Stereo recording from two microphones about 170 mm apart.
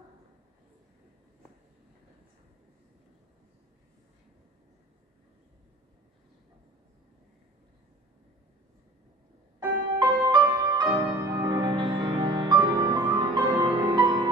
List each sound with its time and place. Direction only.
9.9 s music: 25° right (ahead or behind)